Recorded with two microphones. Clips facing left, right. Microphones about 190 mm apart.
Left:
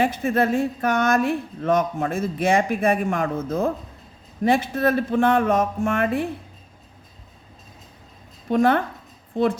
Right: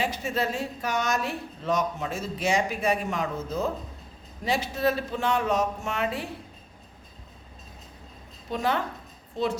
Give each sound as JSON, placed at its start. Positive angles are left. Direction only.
{"t": 0.0, "sound": "a woman's voice", "side_deg": 55}
{"t": 8.4, "sound": "a woman's voice", "side_deg": 55}